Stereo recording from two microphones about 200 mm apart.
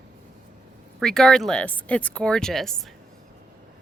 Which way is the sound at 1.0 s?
Centre (ahead or behind).